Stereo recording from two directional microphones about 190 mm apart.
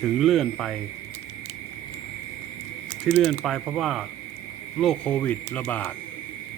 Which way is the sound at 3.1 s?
Centre (ahead or behind).